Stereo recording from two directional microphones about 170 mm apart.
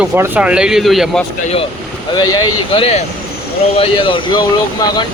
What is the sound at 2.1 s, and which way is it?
Speech, 25° left (ahead or behind).